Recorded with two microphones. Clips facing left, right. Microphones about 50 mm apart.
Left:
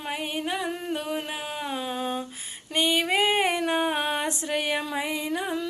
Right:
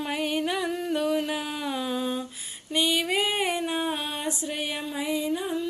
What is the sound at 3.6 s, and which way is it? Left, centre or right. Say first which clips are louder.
Music: left 3 dB; left.